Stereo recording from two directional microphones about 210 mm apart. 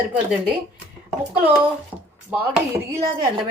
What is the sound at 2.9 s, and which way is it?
Speech, 15° right (ahead or behind).